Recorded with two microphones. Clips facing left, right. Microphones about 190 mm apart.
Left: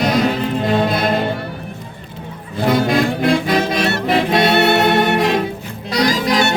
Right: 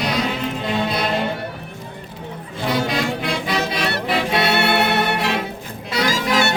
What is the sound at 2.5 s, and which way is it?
Music, 50° left (ahead or behind).